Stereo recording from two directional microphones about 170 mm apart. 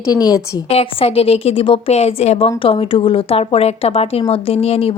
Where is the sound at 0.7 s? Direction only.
35° left (ahead or behind).